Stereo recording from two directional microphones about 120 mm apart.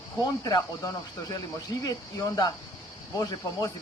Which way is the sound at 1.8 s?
30° left (ahead or behind).